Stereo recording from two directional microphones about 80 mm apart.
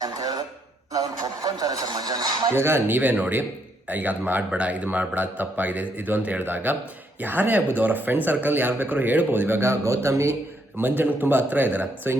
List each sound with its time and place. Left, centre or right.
0.0 s a sound: right
2.6 s speech: right
10.8 s speech: right